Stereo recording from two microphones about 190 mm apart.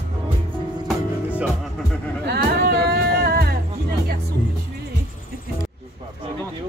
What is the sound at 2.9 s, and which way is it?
Music, 55° right (ahead or behind).